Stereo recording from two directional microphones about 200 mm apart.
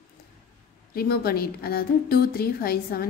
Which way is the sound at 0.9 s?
50° left (ahead or behind).